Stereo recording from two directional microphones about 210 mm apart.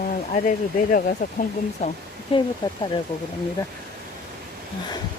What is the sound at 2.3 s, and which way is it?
Speech, 25° left (ahead or behind).